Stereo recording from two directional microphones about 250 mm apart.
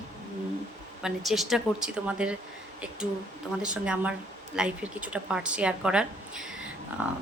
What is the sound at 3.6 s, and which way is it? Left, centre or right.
A woman's voice, centre.